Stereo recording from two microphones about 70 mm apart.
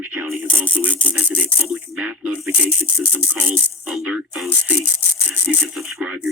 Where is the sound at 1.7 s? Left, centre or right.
Centre.